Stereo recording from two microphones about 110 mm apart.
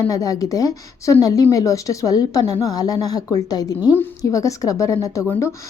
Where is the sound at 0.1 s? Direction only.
30° left (ahead or behind).